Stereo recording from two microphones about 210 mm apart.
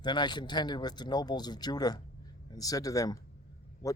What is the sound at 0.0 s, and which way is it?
Speech, 20° left (ahead or behind).